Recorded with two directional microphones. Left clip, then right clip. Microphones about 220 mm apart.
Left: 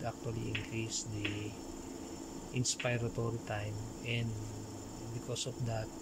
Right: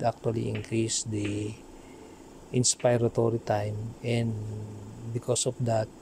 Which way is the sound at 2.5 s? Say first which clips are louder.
Right 11 dB; 30° right (ahead or behind).